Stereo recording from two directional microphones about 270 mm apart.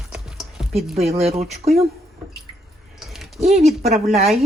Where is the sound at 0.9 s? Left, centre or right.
Right.